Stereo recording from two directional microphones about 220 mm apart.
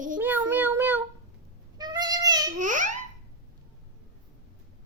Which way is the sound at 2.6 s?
35° right (ahead or behind).